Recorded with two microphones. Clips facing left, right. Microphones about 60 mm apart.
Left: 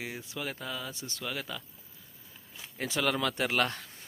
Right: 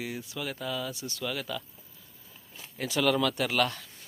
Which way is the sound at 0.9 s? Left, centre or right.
Left.